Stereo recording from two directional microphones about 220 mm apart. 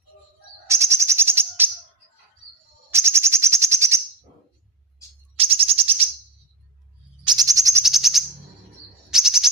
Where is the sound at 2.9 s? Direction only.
10° right (ahead or behind).